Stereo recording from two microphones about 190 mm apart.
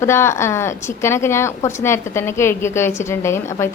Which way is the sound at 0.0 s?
15° left (ahead or behind).